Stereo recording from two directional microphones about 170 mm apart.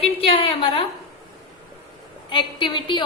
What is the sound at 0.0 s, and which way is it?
Speech, 35° left (ahead or behind).